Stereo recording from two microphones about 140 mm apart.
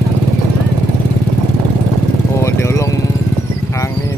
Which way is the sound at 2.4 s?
20° left (ahead or behind).